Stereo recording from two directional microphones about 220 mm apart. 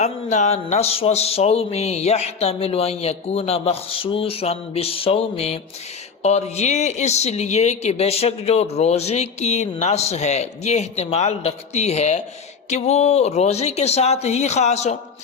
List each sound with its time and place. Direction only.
0.0 s speech: 30° left (ahead or behind)